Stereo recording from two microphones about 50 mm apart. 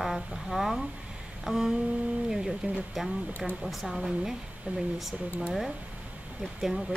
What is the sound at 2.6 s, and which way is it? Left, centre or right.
Speech, right.